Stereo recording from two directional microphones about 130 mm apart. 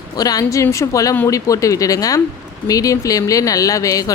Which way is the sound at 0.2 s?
30° left (ahead or behind).